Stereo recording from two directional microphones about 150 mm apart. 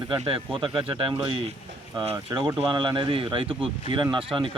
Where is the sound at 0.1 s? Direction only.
35° right (ahead or behind).